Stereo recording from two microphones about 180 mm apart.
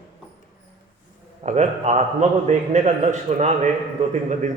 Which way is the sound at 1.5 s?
40° right (ahead or behind).